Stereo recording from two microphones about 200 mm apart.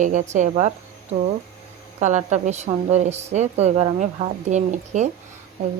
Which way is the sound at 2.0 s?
35° right (ahead or behind).